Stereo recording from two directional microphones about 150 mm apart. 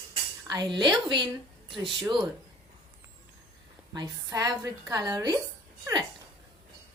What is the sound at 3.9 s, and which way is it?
A woman's voice, 25° right (ahead or behind).